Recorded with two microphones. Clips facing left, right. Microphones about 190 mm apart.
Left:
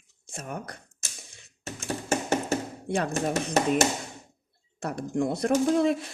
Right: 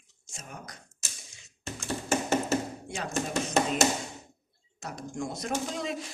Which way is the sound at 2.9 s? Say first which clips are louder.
Left 6 dB; 60° left (ahead or behind).